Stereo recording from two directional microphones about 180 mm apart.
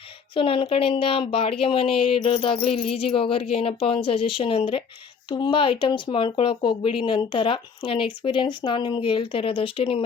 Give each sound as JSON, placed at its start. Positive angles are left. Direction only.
{"t": 0.3, "sound": "a woman's voice", "side_deg": 30}